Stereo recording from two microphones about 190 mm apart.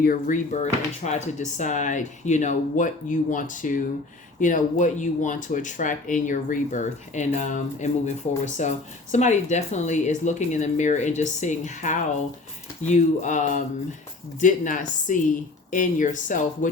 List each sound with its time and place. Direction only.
0.0 s speech: 45° left (ahead or behind)